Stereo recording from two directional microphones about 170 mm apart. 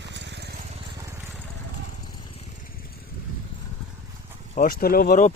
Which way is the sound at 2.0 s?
25° left (ahead or behind).